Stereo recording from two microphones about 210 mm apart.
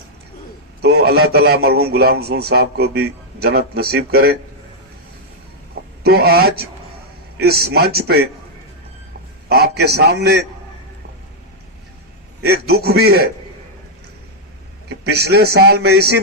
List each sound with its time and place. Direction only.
0.8 s a man's voice: 50° right (ahead or behind)
6.0 s a man's voice: 50° right (ahead or behind)
9.5 s a man's voice: 50° right (ahead or behind)
12.7 s a man's voice: 50° right (ahead or behind)
14.8 s a man's voice: 50° right (ahead or behind)